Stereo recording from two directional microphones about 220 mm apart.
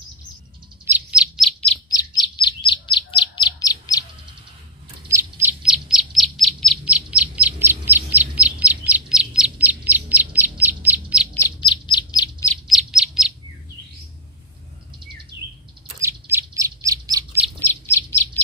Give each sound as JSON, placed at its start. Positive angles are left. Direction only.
{"t": 0.8, "sound": "bird", "side_deg": -5}
{"t": 1.9, "sound": "chirp", "side_deg": 20}
{"t": 5.0, "sound": "bird", "side_deg": -10}
{"t": 11.3, "sound": "bird", "side_deg": 20}
{"t": 12.6, "sound": "bird", "side_deg": 0}
{"t": 15.3, "sound": "bird", "side_deg": -50}
{"t": 16.0, "sound": "bird", "side_deg": -10}
{"t": 17.6, "sound": "bird", "side_deg": 10}